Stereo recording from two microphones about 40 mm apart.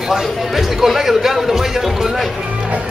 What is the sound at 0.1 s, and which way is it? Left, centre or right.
A man's voice, centre.